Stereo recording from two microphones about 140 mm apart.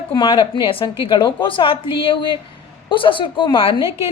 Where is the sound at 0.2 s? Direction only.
35° left (ahead or behind).